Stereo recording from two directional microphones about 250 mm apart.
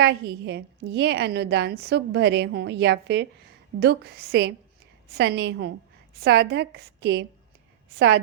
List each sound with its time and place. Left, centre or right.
0.0 s a woman's voice: right